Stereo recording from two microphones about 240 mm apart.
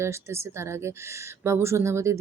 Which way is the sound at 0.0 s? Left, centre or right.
Centre.